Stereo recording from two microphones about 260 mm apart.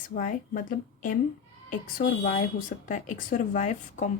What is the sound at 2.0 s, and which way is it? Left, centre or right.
Speech, left.